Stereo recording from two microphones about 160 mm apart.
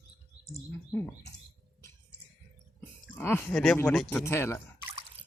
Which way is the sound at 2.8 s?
15° left (ahead or behind).